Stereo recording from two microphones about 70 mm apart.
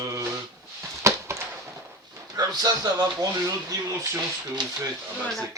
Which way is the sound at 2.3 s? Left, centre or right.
Right.